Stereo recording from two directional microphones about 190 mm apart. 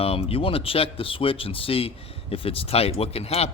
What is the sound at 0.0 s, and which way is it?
Speech, 30° left (ahead or behind).